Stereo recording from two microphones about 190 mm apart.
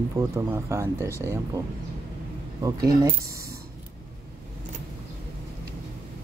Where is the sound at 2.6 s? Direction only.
15° right (ahead or behind).